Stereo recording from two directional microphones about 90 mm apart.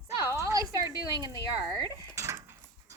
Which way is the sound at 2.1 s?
35° right (ahead or behind).